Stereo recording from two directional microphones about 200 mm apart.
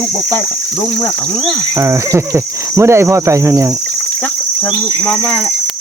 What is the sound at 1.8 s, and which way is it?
Speech, 15° right (ahead or behind).